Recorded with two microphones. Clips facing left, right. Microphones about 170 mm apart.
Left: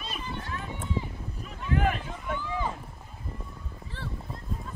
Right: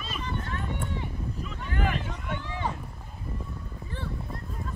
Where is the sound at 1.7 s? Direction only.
25° left (ahead or behind).